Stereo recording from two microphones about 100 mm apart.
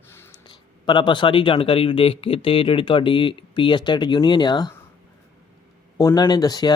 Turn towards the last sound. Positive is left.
turn(degrees=40)  # may be behind; listen again after turning